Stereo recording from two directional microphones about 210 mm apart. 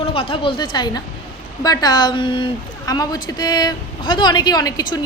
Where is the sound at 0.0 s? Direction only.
25° left (ahead or behind).